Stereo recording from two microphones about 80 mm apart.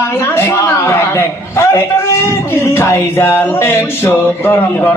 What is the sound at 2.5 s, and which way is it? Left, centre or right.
Music, left.